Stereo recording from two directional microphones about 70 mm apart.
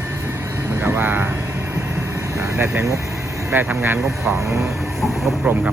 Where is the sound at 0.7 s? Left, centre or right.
Right.